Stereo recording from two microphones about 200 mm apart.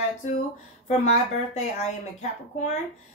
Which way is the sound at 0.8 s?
35° left (ahead or behind).